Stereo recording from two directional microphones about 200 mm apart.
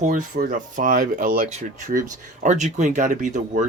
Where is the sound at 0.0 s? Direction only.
40° right (ahead or behind).